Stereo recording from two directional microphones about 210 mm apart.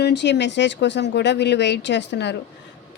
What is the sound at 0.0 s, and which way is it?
A woman's voice, 55° left (ahead or behind).